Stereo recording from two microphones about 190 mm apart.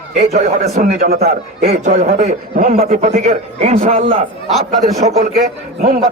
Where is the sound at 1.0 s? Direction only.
55° right (ahead or behind).